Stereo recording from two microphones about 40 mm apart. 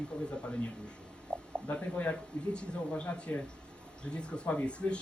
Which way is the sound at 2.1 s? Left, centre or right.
Left.